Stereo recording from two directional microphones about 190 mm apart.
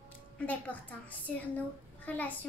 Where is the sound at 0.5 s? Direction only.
10° left (ahead or behind).